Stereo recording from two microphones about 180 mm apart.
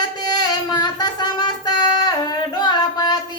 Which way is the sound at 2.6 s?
25° left (ahead or behind).